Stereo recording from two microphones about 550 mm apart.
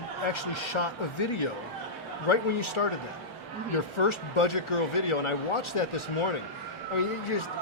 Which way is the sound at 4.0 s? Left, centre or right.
Left.